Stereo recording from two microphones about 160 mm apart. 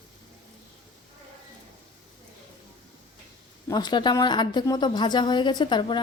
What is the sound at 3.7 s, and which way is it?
A woman's voice, 25° left (ahead or behind).